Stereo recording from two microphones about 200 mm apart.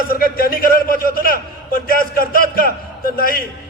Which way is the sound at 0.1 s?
45° left (ahead or behind).